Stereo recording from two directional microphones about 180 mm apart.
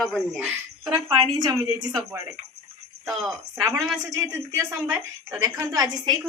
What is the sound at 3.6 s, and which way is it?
A woman's voice, 15° right (ahead or behind).